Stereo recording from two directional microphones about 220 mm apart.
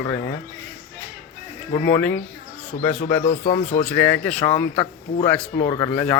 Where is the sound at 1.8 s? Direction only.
10° left (ahead or behind).